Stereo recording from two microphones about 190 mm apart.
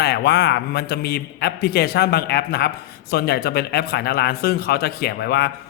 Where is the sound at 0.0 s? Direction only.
60° left (ahead or behind).